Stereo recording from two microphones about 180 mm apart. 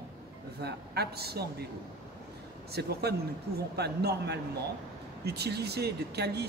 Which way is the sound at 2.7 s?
65° right (ahead or behind).